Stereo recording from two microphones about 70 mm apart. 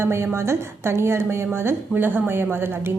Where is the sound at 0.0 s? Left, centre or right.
Right.